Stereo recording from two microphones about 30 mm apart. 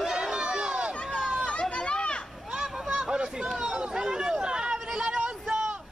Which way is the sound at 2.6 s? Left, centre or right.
Right.